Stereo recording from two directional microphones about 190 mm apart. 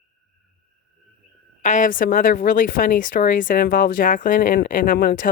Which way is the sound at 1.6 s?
40° left (ahead or behind).